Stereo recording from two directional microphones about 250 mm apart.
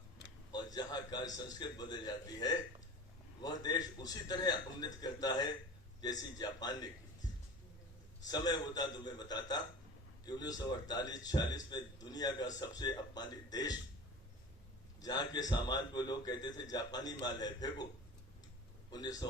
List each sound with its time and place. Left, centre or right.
0.5 s a man's voice: centre
8.3 s a man's voice: centre
15.0 s a man's voice: centre
18.9 s a man's voice: centre